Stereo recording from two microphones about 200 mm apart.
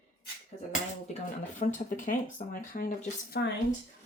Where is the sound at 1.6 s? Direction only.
35° left (ahead or behind).